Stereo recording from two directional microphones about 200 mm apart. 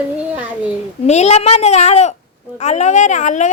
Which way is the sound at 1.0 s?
35° left (ahead or behind).